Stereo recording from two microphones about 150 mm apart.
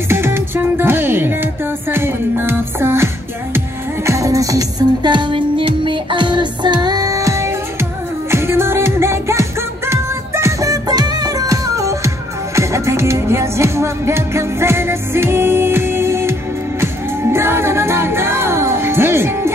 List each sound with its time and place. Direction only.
0.1 s music: 15° right (ahead or behind)